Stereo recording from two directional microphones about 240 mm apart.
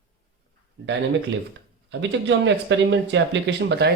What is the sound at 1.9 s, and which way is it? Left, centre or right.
Speech, right.